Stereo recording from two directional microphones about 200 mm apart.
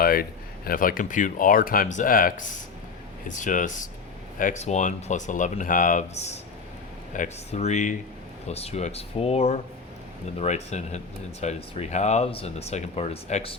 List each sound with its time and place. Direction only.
0.0 s speech: 50° left (ahead or behind); by 13.6 s 30° left (ahead or behind)